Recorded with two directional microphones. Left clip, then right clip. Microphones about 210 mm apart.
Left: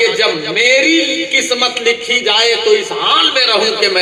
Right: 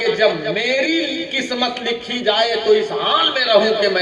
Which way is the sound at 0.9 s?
30° right (ahead or behind).